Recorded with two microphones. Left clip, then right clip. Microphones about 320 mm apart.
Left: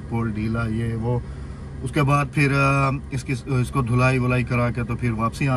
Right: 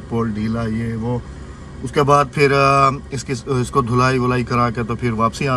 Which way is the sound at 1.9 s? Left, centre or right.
Centre.